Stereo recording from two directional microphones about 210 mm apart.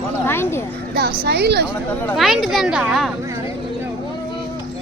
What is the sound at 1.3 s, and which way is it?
Speech, 50° right (ahead or behind).